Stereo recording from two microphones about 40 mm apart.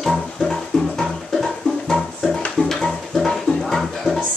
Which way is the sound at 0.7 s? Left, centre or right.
Centre.